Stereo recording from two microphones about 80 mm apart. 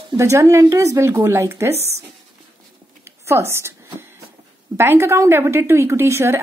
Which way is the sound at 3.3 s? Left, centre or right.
Right.